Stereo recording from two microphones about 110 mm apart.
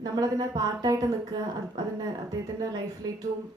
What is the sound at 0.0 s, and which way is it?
A woman's voice, 35° right (ahead or behind).